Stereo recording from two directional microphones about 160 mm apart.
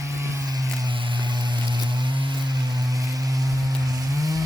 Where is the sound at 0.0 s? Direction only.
20° right (ahead or behind).